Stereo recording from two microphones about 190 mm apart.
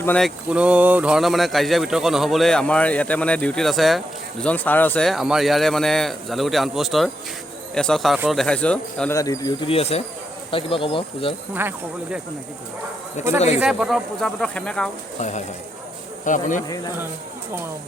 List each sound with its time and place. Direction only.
0.0 s speech: 5° left (ahead or behind)
9.1 s speech: 15° left (ahead or behind)
13.2 s speech: 40° left (ahead or behind)
13.6 s speech: 5° right (ahead or behind)
15.2 s speech: 40° left (ahead or behind)
16.6 s speech: 20° left (ahead or behind)